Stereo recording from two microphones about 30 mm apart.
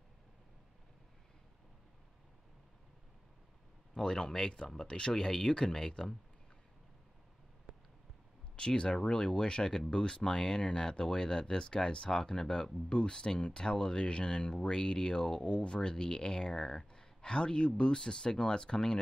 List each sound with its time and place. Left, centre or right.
4.0 s speech: left
5.1 s speech: centre
8.5 s speech: left
15.4 s speech: left; by 16.8 s centre
16.9 s speech: left